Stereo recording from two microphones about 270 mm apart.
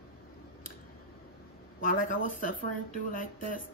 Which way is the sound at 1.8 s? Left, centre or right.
Left.